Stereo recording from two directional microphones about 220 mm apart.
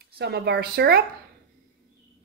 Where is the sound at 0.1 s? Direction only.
50° right (ahead or behind).